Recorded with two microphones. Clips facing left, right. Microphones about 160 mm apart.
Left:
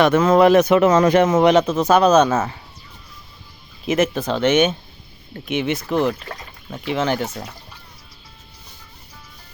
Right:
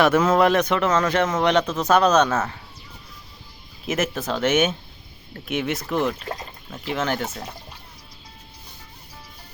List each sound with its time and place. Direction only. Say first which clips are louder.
0.0 s speech: left 4 dB; 5° right (ahead or behind)
3.8 s speech: left 5 dB; 5° right (ahead or behind)
5.9 s speech: left 4 dB; 30° left (ahead or behind)
6.7 s speech: left 4 dB; centre (ahead or behind)